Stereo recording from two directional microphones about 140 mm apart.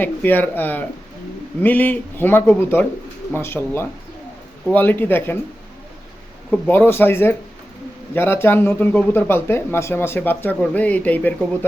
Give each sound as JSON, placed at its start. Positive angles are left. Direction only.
{"t": 0.0, "sound": "a man's voice", "side_deg": 15}
{"t": 6.5, "sound": "a man's voice", "side_deg": 15}